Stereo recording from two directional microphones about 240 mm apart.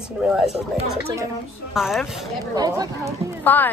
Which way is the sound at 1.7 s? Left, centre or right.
Centre.